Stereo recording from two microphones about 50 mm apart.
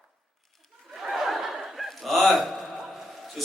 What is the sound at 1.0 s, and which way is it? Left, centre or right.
Snicker, centre.